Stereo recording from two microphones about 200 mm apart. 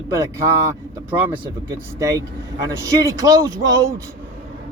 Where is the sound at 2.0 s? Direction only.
20° right (ahead or behind).